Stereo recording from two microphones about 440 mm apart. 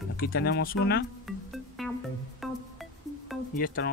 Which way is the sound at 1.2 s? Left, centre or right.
Centre.